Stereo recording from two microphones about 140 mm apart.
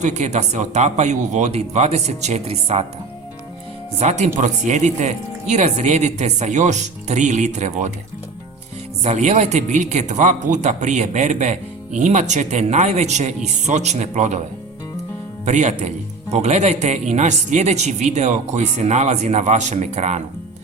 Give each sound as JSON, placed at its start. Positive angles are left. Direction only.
{"t": 0.0, "sound": "a man's voice", "side_deg": -55}
{"t": 3.9, "sound": "a man's voice", "side_deg": -55}
{"t": 9.0, "sound": "a man's voice", "side_deg": -55}
{"t": 15.4, "sound": "a man's voice", "side_deg": -55}